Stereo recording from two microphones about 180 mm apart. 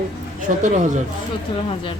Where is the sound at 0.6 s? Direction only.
40° right (ahead or behind).